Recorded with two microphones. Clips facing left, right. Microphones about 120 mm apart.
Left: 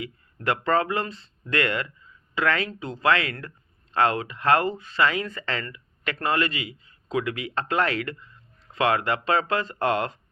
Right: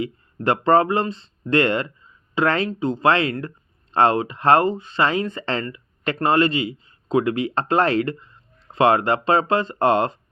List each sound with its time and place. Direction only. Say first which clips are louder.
0.0 s speech: right 6 dB; 30° right (ahead or behind)